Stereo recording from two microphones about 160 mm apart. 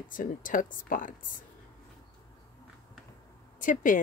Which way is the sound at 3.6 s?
55° left (ahead or behind).